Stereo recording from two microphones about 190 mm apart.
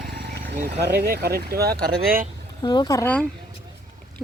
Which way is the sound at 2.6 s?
20° left (ahead or behind).